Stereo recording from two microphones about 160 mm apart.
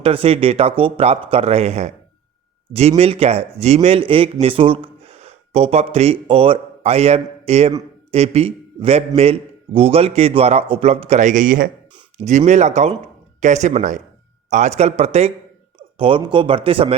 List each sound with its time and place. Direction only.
0.0 s speech: 35° right (ahead or behind)